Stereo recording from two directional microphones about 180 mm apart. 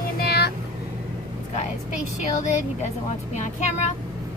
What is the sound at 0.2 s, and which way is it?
Vehicle, 60° left (ahead or behind).